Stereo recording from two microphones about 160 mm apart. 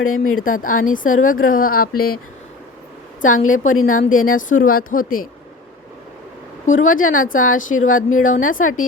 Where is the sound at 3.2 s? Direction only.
55° left (ahead or behind).